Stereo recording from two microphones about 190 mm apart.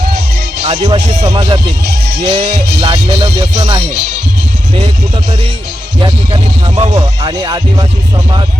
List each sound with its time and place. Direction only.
0.7 s speech: 30° right (ahead or behind)
1.8 s music: 60° right (ahead or behind)
2.2 s music: 30° right (ahead or behind)
2.5 s music: 60° right (ahead or behind)
3.1 s speech: 30° right (ahead or behind)
6.0 s speech: 25° right (ahead or behind)